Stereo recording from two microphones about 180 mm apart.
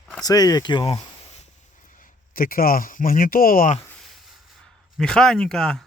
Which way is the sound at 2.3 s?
55° left (ahead or behind).